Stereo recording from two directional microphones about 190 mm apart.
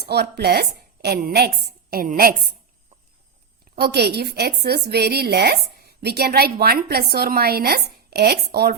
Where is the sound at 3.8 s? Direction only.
60° right (ahead or behind).